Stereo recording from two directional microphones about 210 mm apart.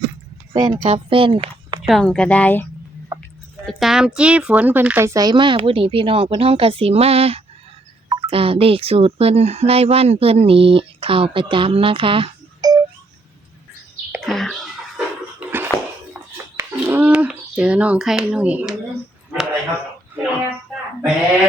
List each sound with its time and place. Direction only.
0.5 s speech: 20° right (ahead or behind)
0.8 s a woman's voice: 30° right (ahead or behind)
1.9 s speech: 5° left (ahead or behind)
3.7 s speech: centre (ahead or behind); by 12.8 s 20° right (ahead or behind)
14.1 s a sound: centre (ahead or behind)